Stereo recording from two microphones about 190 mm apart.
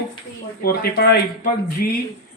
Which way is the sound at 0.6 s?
50° left (ahead or behind).